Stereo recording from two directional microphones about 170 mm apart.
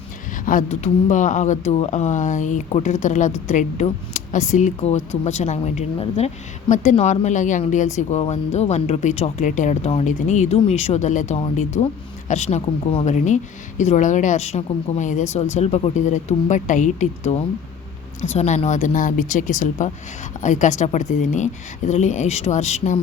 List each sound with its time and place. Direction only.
0.4 s speech: 45° left (ahead or behind)